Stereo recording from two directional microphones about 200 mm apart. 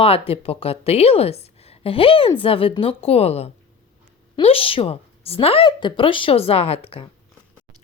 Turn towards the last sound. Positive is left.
turn(degrees=30)  # may be behind; listen again after turning